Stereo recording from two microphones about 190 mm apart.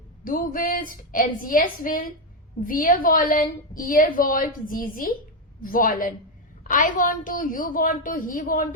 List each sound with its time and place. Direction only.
0.3 s a woman's voice: 45° left (ahead or behind)